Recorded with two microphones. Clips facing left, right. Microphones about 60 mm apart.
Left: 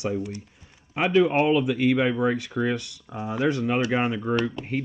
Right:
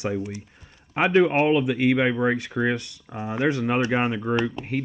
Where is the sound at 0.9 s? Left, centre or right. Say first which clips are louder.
Right 2 dB; right.